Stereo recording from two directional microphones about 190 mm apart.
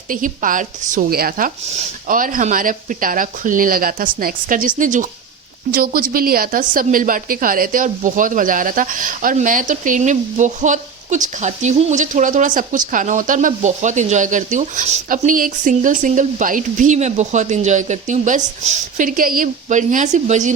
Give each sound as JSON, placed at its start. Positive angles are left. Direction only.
{"t": 0.1, "sound": "a woman's voice", "side_deg": -45}